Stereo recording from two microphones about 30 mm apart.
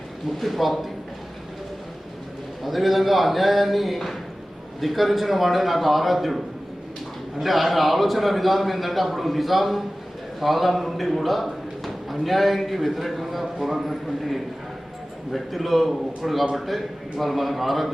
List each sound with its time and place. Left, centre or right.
0.3 s a man's voice: centre
2.6 s a man's voice: centre